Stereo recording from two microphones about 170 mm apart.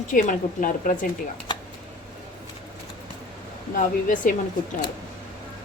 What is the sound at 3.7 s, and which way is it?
Speech, 50° left (ahead or behind).